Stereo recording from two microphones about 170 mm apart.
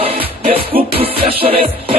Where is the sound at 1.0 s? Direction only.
35° right (ahead or behind).